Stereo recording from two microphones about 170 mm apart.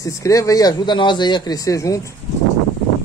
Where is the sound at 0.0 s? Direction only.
20° left (ahead or behind).